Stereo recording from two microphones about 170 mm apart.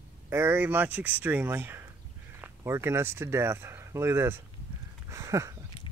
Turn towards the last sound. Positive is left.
turn(degrees=-20)  # may be behind; listen again after turning